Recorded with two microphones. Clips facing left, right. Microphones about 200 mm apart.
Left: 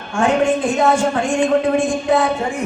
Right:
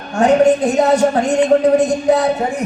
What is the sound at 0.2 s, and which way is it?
A man's voice, 40° right (ahead or behind).